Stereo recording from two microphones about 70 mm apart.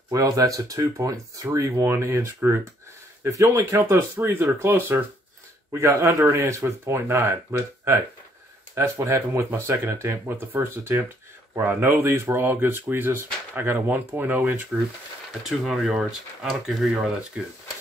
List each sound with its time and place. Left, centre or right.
0.1 s speech: right
1.8 s speech: right
4.3 s speech: right
15.4 s speech: centre